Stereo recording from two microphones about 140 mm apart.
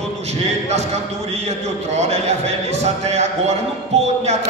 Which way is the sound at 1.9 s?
50° right (ahead or behind).